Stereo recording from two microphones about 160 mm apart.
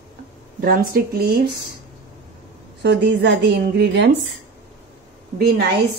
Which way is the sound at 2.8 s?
90° right.